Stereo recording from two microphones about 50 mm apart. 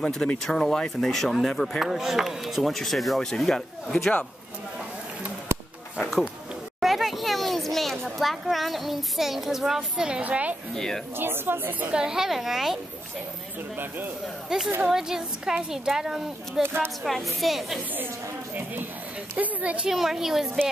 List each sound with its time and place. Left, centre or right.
0.0 s speech: centre
6.8 s children playing: centre
10.2 s speech: right
11.1 s speech: right
11.9 s a woman's voice: centre
14.2 s a woman's voice: centre
16.6 s speech: right
17.0 s speech: centre
17.9 s a sound: right
19.3 s speech: right
19.9 s a woman's voice: centre